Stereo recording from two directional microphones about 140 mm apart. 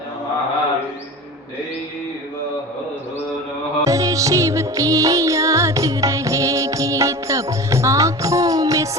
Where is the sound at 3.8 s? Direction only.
25° right (ahead or behind).